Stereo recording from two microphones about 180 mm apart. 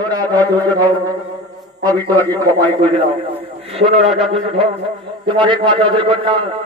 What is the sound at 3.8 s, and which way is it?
A man's voice, 35° right (ahead or behind).